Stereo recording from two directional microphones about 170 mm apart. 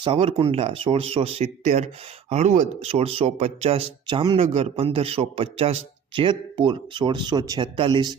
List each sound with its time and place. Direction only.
0.0 s speech: 35° right (ahead or behind)